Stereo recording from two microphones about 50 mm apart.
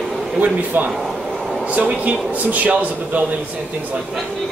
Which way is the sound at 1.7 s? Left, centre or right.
Right.